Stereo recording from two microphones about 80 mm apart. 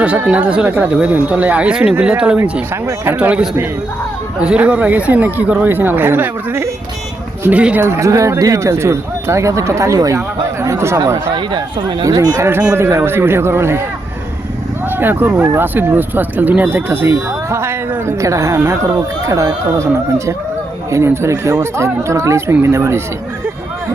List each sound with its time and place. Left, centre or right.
0.0 s speech: centre
2.4 s speech: right
3.2 s speech: centre
7.8 s speech: right
11.3 s speech: right
12.0 s speech: right
12.7 s speech: right
14.9 s speech: right